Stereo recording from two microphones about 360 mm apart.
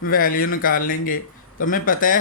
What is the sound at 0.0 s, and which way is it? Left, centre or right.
A man's voice, left.